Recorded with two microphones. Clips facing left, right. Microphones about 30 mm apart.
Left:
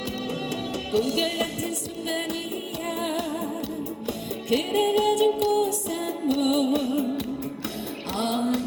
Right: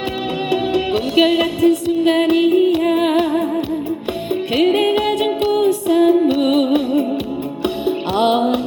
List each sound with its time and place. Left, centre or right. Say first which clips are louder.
0.5 s music: right 9 dB; right
4.5 s music: right 7 dB; right